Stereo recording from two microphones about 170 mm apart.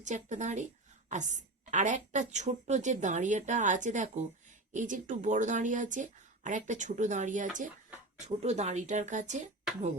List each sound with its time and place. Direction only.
0.0 s a woman's voice: 45° right (ahead or behind)